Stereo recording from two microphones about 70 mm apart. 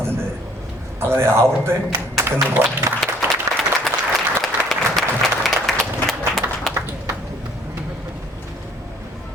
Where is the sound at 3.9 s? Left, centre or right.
Centre.